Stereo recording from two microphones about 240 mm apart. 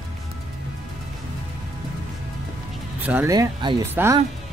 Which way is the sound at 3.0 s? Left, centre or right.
Centre.